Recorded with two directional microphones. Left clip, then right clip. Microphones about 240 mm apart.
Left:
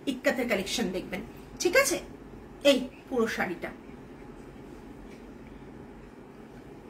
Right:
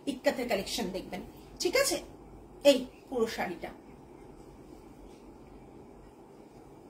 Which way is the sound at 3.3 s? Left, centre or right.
Centre.